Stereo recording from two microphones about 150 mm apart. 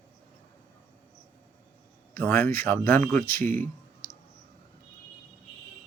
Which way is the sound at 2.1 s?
15° left (ahead or behind).